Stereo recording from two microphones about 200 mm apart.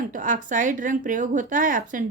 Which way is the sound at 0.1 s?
40° right (ahead or behind).